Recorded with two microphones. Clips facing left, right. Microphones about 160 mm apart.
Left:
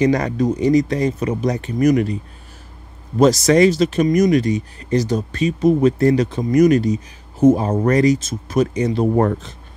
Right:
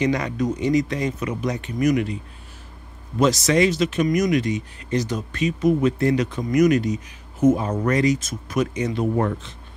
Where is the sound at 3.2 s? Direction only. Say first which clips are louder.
Left 6 dB; 40° left (ahead or behind).